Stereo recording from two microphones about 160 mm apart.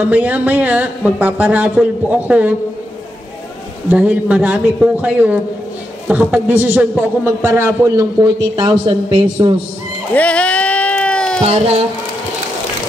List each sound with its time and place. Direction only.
0.0 s a man's voice: 10° right (ahead or behind)
3.9 s a man's voice: 10° right (ahead or behind); by 9.6 s 30° right (ahead or behind)
10.1 s a sound: 10° left (ahead or behind)
11.4 s speech: 40° right (ahead or behind)